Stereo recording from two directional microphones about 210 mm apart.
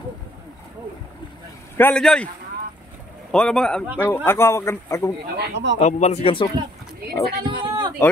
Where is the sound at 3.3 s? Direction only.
5° left (ahead or behind).